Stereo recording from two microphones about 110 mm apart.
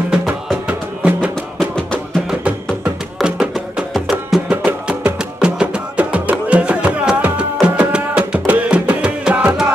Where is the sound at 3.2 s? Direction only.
5° right (ahead or behind).